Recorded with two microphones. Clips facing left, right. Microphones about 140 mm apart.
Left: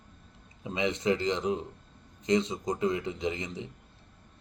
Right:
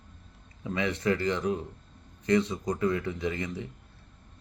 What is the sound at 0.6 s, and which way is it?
A man's voice, 20° left (ahead or behind).